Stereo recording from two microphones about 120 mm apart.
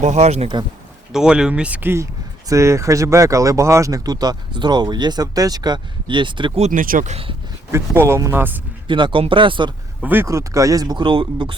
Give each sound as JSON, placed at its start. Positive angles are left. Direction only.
{"t": 0.0, "sound": "speech", "side_deg": -70}
{"t": 1.1, "sound": "speech", "side_deg": -5}
{"t": 6.6, "sound": "speech", "side_deg": -75}
{"t": 7.7, "sound": "speech", "side_deg": -20}
{"t": 8.9, "sound": "speech", "side_deg": -40}
{"t": 10.0, "sound": "speech", "side_deg": -15}
{"t": 10.2, "sound": "speech", "side_deg": -25}